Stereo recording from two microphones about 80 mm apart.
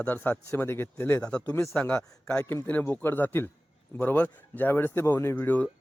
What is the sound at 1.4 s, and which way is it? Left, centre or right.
Speech, left.